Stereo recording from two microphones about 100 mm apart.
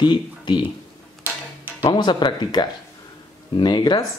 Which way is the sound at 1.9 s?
50° left (ahead or behind).